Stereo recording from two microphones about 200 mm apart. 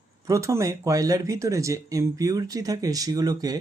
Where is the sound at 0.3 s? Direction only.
15° right (ahead or behind).